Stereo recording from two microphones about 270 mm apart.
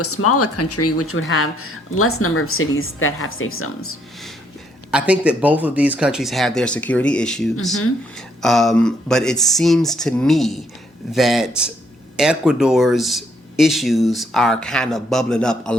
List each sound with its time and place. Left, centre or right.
0.0 s speech: left
4.9 s speech: centre